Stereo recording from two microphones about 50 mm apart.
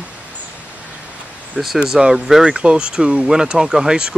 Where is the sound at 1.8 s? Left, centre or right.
Centre.